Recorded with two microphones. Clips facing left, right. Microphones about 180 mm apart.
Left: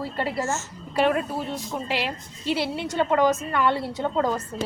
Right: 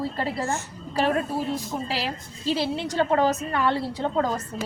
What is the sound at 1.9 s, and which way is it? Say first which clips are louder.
A woman's voice: left 1 dB; 35° right (ahead or behind).